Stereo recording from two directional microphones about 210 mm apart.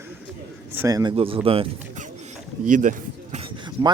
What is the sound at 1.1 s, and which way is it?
Speech, 25° right (ahead or behind).